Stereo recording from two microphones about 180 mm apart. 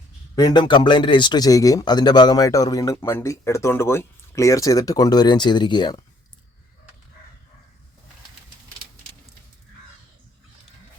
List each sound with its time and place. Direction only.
0.3 s speech: 25° left (ahead or behind)